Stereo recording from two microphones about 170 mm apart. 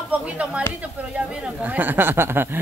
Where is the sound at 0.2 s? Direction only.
5° right (ahead or behind).